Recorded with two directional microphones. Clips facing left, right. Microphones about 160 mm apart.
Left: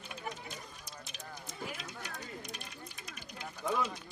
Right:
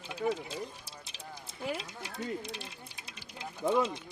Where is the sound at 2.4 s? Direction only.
30° right (ahead or behind).